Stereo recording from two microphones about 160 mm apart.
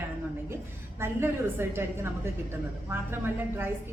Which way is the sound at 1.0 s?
15° right (ahead or behind).